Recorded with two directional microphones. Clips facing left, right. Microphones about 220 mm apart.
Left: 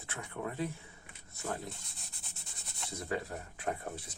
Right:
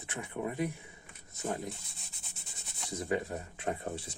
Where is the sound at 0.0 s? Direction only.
15° right (ahead or behind).